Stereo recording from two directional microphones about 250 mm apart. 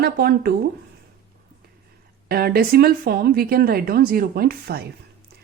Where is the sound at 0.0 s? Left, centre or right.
Right.